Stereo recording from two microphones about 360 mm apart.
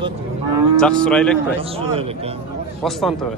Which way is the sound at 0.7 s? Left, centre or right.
Centre.